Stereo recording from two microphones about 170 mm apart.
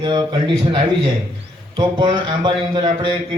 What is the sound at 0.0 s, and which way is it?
A man's voice, 25° right (ahead or behind).